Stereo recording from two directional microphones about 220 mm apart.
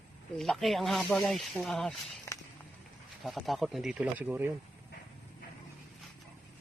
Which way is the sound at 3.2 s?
Centre (ahead or behind).